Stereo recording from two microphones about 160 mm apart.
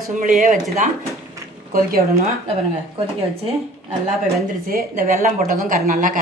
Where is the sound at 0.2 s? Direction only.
60° right (ahead or behind).